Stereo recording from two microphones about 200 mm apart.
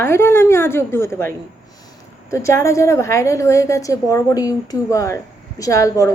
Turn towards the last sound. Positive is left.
turn(degrees=15)  # may be behind; listen again after turning